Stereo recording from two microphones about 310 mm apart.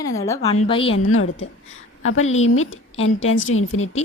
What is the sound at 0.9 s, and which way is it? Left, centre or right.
A woman's voice, left.